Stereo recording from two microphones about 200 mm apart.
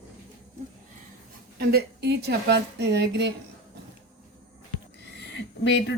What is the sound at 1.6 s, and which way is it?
A woman's voice, 50° right (ahead or behind).